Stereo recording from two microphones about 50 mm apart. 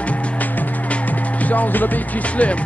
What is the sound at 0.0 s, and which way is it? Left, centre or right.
Music, left.